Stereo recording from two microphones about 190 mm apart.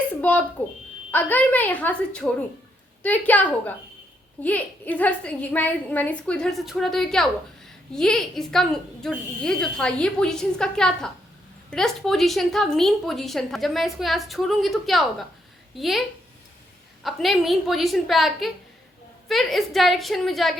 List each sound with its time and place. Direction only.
0.2 s a woman's voice: 10° left (ahead or behind)